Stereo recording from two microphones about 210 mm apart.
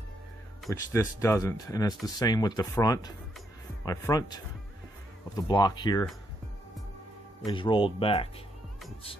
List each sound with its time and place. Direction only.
0.7 s speech: 15° left (ahead or behind)
7.4 s speech: 25° left (ahead or behind)